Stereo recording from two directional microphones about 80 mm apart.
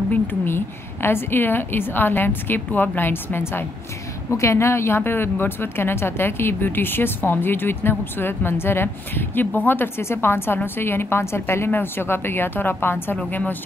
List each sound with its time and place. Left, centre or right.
0.1 s speech: left